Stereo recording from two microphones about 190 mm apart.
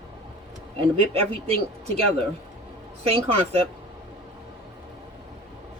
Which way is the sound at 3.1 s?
35° right (ahead or behind).